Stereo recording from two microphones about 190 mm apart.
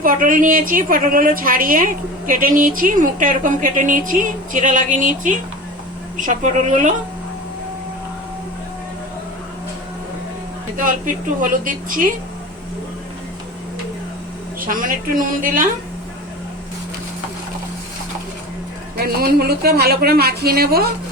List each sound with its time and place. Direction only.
0.0 s a woman's voice: 45° right (ahead or behind)
10.8 s a woman's voice: 45° right (ahead or behind)
14.6 s a woman's voice: 45° right (ahead or behind)
18.9 s speech: 55° right (ahead or behind)